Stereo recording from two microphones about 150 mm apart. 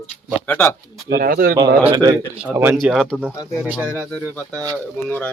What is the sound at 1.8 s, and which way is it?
Speech, 35° right (ahead or behind).